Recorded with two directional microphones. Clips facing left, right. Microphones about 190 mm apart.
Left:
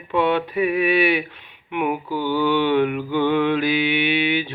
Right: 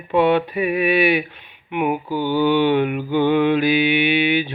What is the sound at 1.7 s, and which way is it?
Speech, 5° right (ahead or behind).